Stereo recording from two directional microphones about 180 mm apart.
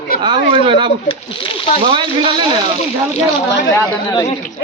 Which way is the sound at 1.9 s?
30° right (ahead or behind).